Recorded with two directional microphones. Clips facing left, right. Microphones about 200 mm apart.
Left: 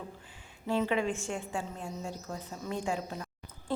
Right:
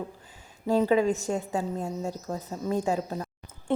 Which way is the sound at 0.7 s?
40° right (ahead or behind).